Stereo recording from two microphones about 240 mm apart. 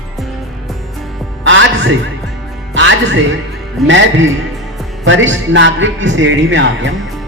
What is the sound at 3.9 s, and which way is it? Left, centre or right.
Speech, right.